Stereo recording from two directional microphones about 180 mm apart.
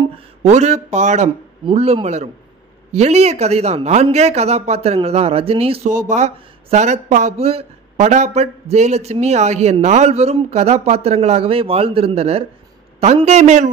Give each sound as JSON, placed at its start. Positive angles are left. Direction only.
{"t": 0.4, "sound": "speech", "side_deg": -40}